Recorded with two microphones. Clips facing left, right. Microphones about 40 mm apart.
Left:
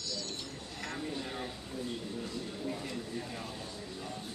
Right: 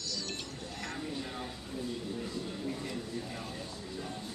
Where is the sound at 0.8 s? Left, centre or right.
Centre.